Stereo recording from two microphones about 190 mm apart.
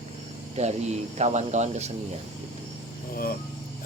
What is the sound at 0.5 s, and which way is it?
Speech, 35° right (ahead or behind).